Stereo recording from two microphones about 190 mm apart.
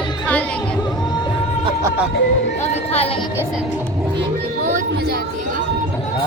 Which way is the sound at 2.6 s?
35° left (ahead or behind).